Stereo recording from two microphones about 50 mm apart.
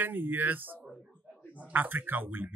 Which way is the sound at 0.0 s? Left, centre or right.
Right.